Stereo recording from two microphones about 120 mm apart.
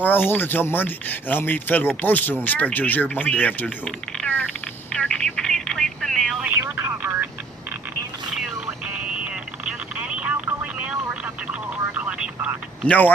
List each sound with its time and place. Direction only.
0.0 s speech: 15° left (ahead or behind)
4.9 s telephone: 5° left (ahead or behind)
6.7 s telephone: 15° right (ahead or behind)
8.6 s vehicle: 10° right (ahead or behind)
11.9 s telephone: 10° right (ahead or behind)
12.9 s speech: 15° left (ahead or behind)